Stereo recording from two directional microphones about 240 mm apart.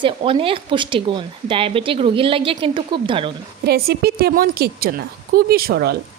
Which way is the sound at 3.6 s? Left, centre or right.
Right.